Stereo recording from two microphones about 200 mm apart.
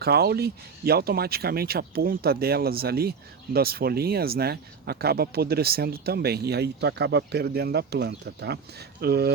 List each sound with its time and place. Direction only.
0.0 s speech: 50° right (ahead or behind)